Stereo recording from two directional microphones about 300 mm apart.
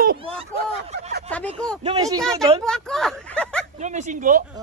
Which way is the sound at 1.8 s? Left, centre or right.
Centre.